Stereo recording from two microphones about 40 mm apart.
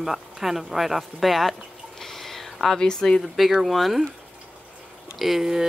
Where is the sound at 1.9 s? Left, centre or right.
Centre.